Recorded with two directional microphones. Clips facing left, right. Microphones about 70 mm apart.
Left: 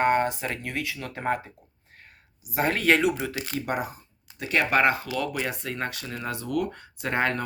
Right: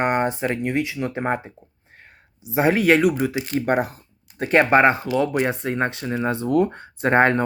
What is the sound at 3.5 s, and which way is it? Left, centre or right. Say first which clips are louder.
Speech: right 9 dB; right.